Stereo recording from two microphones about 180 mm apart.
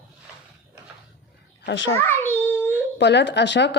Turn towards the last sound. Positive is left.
turn(degrees=80)